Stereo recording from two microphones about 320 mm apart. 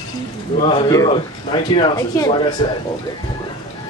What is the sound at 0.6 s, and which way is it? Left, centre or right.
Speech, centre.